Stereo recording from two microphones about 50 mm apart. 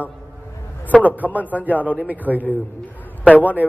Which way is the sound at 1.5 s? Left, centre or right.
Right.